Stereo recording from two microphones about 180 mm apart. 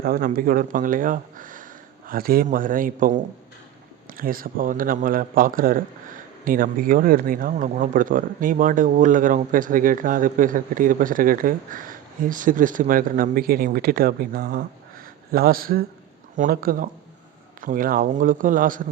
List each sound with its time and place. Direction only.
0.0 s speech: 55° right (ahead or behind)
4.2 s speech: 55° right (ahead or behind)